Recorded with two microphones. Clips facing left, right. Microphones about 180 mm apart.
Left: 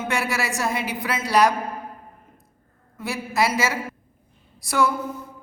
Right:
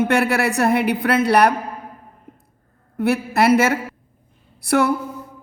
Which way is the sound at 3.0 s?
60° right (ahead or behind).